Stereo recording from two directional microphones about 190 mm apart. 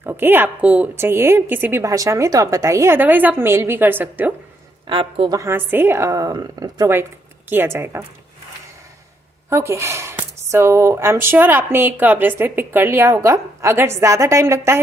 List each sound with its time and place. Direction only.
0.0 s a woman's voice: 10° right (ahead or behind)
4.9 s a woman's voice: 25° right (ahead or behind)
5.4 s a woman's voice: 10° right (ahead or behind)
9.5 s a woman's voice: 15° right (ahead or behind)